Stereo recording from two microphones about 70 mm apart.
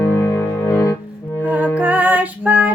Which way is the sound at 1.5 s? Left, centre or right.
Right.